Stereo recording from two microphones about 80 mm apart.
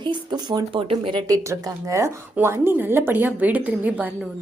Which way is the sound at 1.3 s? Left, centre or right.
Right.